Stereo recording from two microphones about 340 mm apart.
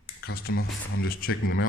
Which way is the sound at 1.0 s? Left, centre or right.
Left.